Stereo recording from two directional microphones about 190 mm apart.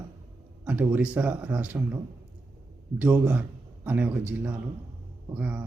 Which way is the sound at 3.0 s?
10° right (ahead or behind).